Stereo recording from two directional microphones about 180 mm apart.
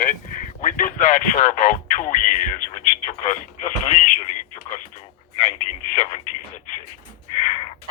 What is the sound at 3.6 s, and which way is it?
Speech, 45° left (ahead or behind).